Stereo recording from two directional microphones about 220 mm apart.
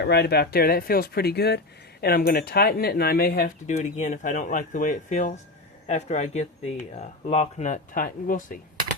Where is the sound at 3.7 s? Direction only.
30° left (ahead or behind).